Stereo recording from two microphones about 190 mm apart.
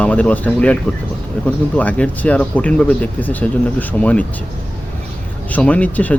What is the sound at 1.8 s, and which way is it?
Speech, 10° left (ahead or behind).